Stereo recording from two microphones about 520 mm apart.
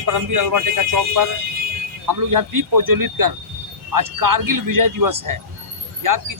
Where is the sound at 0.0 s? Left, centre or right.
Right.